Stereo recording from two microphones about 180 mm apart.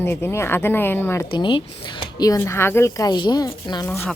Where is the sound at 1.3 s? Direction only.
25° left (ahead or behind).